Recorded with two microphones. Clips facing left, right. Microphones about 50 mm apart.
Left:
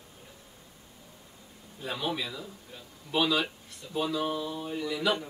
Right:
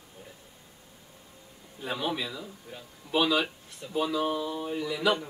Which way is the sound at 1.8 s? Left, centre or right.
Centre.